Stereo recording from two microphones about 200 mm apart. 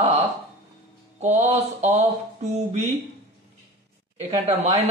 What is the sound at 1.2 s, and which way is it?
A man's voice, 35° right (ahead or behind).